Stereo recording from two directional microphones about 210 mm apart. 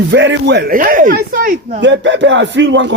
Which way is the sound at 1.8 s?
60° right (ahead or behind).